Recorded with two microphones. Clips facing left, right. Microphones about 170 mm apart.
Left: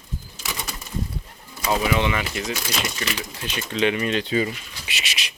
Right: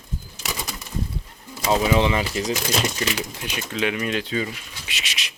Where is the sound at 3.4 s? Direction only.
10° right (ahead or behind).